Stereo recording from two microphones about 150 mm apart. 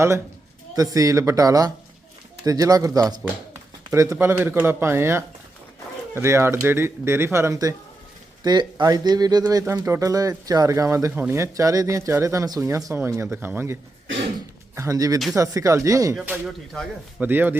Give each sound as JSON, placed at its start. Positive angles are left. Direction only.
{"t": 0.8, "sound": "speech", "side_deg": -20}
{"t": 14.8, "sound": "speech", "side_deg": -20}
{"t": 17.2, "sound": "speech", "side_deg": -10}